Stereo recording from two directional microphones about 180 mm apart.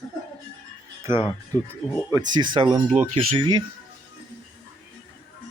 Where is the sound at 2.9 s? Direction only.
40° right (ahead or behind).